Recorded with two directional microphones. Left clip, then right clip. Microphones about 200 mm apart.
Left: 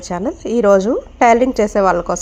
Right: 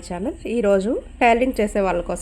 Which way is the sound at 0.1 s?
15° left (ahead or behind).